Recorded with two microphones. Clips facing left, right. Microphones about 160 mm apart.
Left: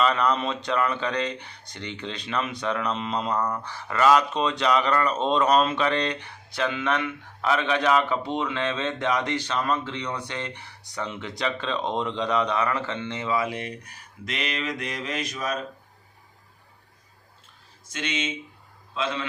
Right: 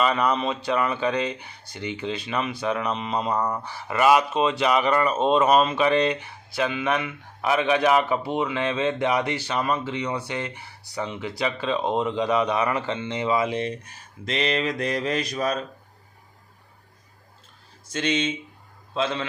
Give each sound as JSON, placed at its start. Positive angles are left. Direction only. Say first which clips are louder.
{"t": 0.0, "sound": "speech", "louder": "right 1 dB", "side_deg": -5}
{"t": 17.9, "sound": "speech", "louder": "right 5 dB", "side_deg": -35}